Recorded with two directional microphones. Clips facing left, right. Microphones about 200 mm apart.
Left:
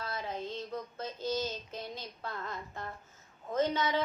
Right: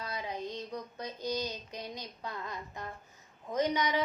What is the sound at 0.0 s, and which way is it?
Female singing, 15° right (ahead or behind).